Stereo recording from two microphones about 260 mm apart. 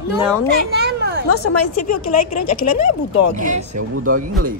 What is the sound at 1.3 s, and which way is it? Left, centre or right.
A woman's voice, left.